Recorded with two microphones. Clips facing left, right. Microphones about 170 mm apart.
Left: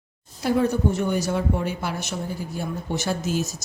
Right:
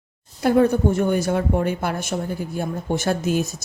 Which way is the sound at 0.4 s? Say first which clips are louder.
Right 4 dB; 55° right (ahead or behind).